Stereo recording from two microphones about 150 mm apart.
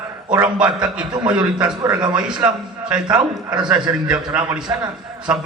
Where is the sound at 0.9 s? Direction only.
30° right (ahead or behind).